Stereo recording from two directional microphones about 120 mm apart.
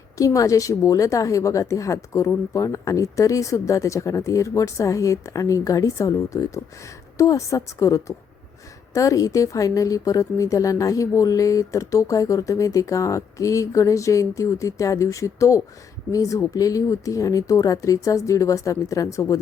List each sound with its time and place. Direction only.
0.2 s a woman's voice: 25° left (ahead or behind)